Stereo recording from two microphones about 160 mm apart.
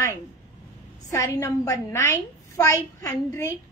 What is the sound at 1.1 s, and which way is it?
A woman's voice, 20° left (ahead or behind).